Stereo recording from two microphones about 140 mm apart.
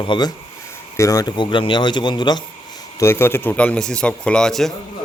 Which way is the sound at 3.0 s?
15° left (ahead or behind).